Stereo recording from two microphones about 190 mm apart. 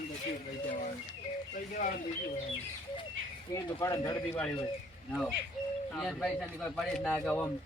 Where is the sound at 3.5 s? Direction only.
20° left (ahead or behind).